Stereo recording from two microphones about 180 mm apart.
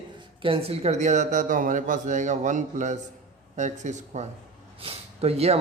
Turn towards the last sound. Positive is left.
turn(degrees=-35)  # may be behind; listen again after turning